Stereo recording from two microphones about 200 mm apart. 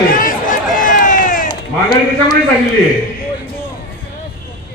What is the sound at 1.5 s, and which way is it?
Speech, 20° left (ahead or behind).